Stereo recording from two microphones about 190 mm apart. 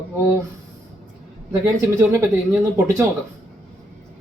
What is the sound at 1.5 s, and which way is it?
Speech, 15° right (ahead or behind).